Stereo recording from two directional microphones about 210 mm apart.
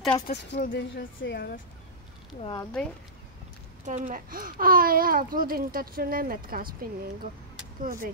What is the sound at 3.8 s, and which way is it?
Speech, 35° right (ahead or behind).